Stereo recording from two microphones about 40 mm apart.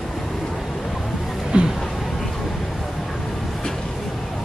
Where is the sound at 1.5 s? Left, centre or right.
Right.